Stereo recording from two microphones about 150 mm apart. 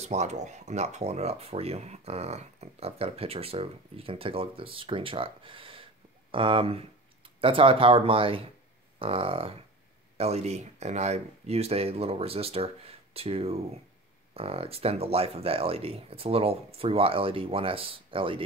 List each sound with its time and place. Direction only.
0.0 s speech: 50° right (ahead or behind)